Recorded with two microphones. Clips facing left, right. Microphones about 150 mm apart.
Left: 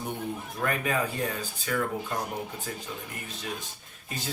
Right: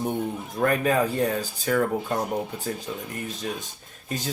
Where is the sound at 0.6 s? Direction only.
35° right (ahead or behind).